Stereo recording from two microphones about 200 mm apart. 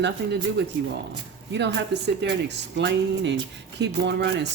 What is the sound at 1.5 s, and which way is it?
Speech, 60° right (ahead or behind).